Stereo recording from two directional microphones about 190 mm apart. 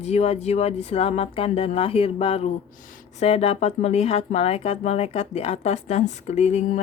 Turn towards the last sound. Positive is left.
turn(degrees=35)  # may be behind; listen again after turning